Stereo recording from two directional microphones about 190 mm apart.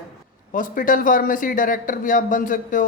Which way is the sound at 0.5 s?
45° left (ahead or behind).